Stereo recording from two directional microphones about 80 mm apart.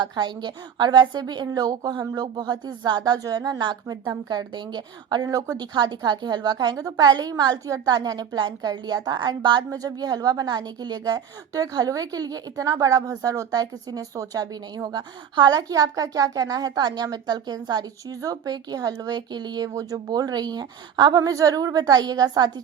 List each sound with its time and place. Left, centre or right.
0.0 s a woman's voice: right
5.7 s a woman's voice: right
9.6 s a woman's voice: right
19.6 s a woman's voice: right